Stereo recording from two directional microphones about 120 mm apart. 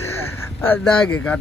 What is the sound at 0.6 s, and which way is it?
Speech, 20° left (ahead or behind).